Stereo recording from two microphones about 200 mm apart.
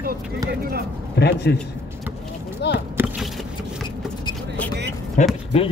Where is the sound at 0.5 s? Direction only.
50° right (ahead or behind).